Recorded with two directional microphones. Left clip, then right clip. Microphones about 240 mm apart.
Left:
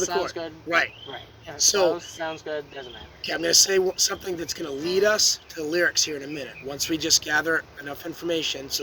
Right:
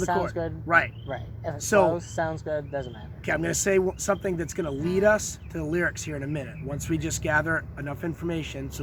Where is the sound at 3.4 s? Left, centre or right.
Left.